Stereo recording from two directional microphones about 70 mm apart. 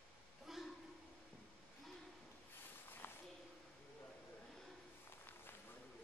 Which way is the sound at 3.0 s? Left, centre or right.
Left.